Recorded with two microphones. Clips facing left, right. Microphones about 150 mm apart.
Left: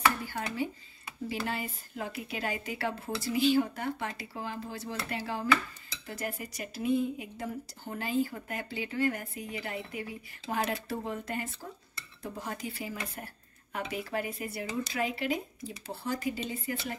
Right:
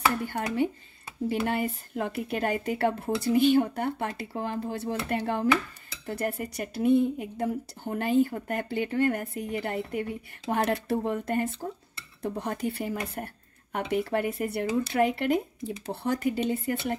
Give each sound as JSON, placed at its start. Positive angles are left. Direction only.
{"t": 0.2, "sound": "speech", "side_deg": -55}